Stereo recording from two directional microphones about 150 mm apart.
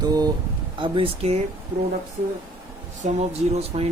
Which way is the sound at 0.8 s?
35° right (ahead or behind).